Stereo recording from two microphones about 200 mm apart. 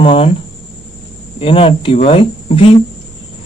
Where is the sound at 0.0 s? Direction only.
30° left (ahead or behind).